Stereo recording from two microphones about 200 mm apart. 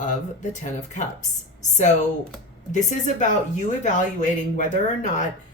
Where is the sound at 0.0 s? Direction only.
40° left (ahead or behind).